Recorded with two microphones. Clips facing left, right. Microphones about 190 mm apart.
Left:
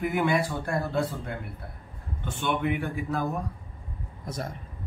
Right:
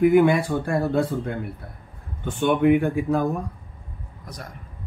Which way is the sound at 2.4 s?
50° right (ahead or behind).